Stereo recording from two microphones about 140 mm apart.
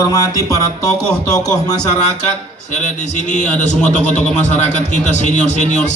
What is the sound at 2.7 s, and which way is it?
Speech, 60° left (ahead or behind).